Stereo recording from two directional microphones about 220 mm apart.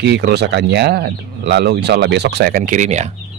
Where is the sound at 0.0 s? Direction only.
50° right (ahead or behind).